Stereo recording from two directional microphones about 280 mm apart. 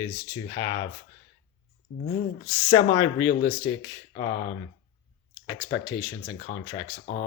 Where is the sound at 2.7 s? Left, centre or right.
Centre.